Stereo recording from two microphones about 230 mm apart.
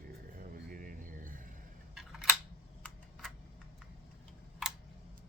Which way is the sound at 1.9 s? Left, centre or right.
Centre.